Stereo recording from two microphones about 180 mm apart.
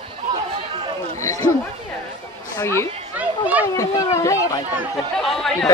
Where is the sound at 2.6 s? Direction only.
15° left (ahead or behind).